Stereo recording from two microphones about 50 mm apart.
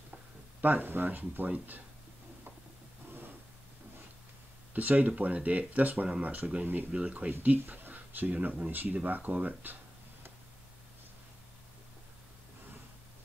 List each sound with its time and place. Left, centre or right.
0.6 s speech: right
4.7 s speech: right
7.4 s speech: right